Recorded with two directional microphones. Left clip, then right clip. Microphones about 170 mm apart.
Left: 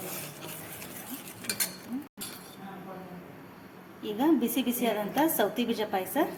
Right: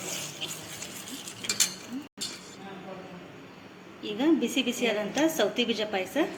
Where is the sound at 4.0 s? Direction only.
30° left (ahead or behind).